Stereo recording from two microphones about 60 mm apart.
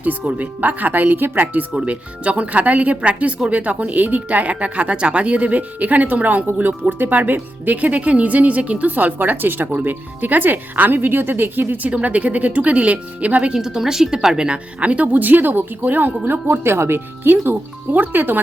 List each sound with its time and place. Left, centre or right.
0.0 s speech: right
1.7 s speech: centre
13.6 s speech: centre; by 18.3 s right